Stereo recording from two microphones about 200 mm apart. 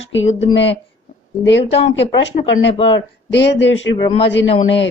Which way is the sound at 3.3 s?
60° left (ahead or behind).